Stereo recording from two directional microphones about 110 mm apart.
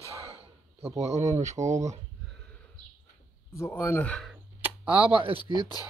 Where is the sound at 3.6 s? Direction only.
25° left (ahead or behind).